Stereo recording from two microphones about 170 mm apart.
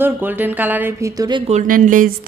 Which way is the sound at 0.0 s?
10° right (ahead or behind).